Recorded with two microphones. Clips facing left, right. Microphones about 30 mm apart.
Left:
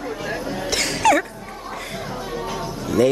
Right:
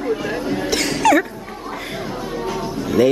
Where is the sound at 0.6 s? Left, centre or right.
Centre.